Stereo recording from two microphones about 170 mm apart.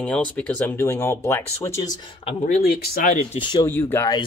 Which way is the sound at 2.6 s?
65° left (ahead or behind).